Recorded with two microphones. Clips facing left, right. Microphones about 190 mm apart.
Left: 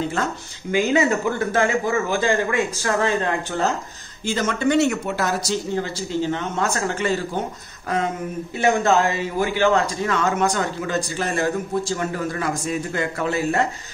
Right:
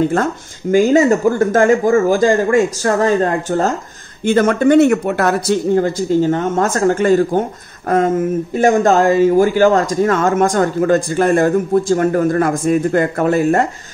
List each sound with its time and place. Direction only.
0.1 s speech: 45° right (ahead or behind)
4.2 s speech: 55° right (ahead or behind)